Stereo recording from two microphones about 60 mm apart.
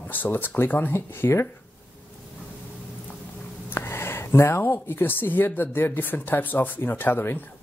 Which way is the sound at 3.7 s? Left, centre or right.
Left.